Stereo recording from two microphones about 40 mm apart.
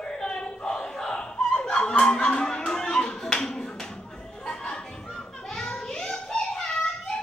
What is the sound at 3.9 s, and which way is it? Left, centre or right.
Children playing, centre.